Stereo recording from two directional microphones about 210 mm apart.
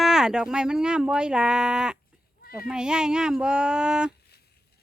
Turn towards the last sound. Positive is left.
turn(degrees=-5)  # may be behind; listen again after turning